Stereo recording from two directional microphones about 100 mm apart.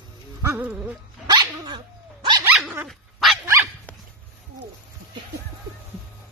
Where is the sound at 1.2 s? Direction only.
40° right (ahead or behind).